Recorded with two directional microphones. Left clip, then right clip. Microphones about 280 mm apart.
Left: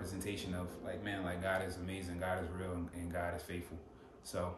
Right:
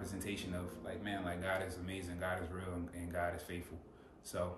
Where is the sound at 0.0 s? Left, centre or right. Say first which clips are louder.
Left 1 dB; centre.